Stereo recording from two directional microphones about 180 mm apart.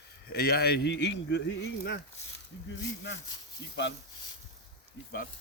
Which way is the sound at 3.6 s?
70° left (ahead or behind).